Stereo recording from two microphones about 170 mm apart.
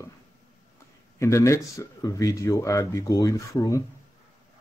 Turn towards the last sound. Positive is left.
turn(degrees=20)  # may be behind; listen again after turning